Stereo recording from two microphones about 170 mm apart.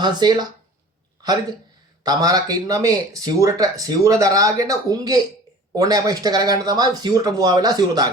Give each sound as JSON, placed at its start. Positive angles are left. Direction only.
{"t": 0.0, "sound": "speech", "side_deg": -25}
{"t": 2.0, "sound": "speech", "side_deg": -20}